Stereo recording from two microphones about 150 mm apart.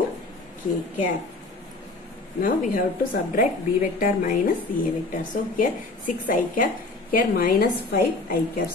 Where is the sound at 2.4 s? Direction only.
65° left (ahead or behind).